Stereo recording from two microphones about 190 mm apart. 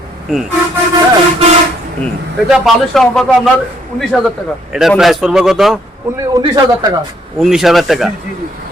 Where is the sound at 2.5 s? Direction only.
Centre (ahead or behind).